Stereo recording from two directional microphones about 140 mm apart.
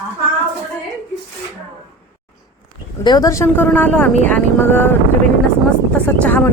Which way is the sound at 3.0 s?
30° left (ahead or behind).